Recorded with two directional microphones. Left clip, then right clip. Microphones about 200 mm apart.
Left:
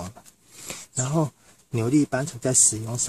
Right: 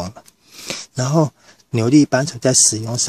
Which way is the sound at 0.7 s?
30° right (ahead or behind).